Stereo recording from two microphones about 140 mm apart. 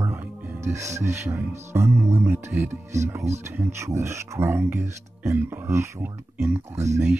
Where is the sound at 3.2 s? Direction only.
55° right (ahead or behind).